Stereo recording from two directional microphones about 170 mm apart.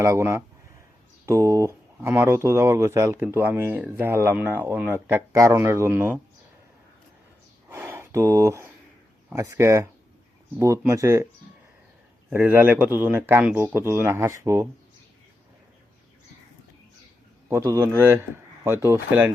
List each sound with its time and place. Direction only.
0.0 s speech: 15° right (ahead or behind)
7.7 s a sound: 15° right (ahead or behind)
9.3 s speech: 15° right (ahead or behind)
12.3 s speech: 15° right (ahead or behind)
17.5 s speech: 15° right (ahead or behind)